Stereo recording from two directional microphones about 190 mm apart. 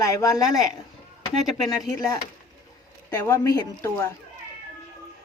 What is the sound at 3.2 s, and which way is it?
Speech, 20° left (ahead or behind).